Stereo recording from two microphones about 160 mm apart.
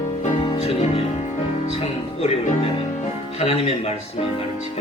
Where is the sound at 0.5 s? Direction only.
40° left (ahead or behind).